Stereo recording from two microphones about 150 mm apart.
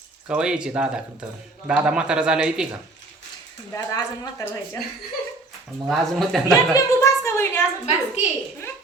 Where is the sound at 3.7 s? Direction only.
25° left (ahead or behind).